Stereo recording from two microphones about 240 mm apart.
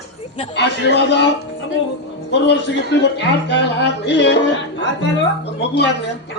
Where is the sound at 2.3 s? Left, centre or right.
Left.